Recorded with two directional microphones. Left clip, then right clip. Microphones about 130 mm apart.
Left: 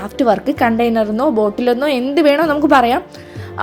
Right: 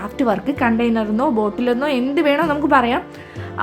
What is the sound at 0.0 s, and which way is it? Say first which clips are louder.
A woman's voice: left 5 dB; 35° left (ahead or behind).